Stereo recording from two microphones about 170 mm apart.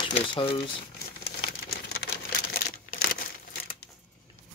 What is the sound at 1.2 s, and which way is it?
Crumpling, 80° left.